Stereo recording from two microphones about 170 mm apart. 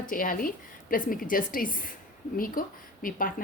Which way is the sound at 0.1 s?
55° left (ahead or behind).